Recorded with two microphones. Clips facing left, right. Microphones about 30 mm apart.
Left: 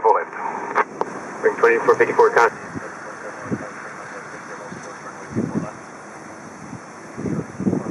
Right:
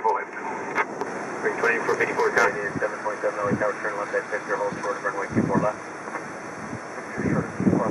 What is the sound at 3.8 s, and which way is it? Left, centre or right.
Speech, right.